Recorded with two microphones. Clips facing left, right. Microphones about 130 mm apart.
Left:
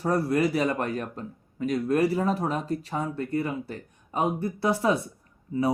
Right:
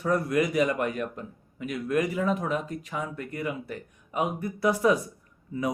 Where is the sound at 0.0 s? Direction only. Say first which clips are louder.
Left 1 dB; 35° left (ahead or behind).